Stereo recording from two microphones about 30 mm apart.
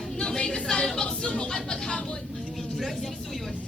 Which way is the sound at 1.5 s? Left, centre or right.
Left.